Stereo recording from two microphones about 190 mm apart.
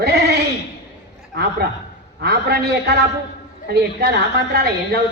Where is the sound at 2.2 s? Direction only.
60° right (ahead or behind).